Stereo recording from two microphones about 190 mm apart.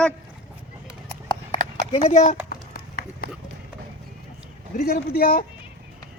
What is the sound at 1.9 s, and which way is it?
Run, 35° left (ahead or behind).